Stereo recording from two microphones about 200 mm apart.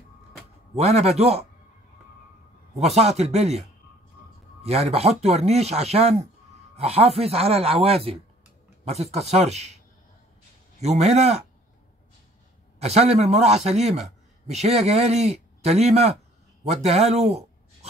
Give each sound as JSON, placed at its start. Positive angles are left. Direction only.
{"t": 0.7, "sound": "speech", "side_deg": -30}
{"t": 2.8, "sound": "speech", "side_deg": -30}
{"t": 4.6, "sound": "speech", "side_deg": -30}
{"t": 10.8, "sound": "speech", "side_deg": -35}
{"t": 12.8, "sound": "speech", "side_deg": -30}